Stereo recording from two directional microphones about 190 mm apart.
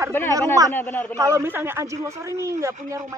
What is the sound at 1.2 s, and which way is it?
A man's voice, 15° right (ahead or behind).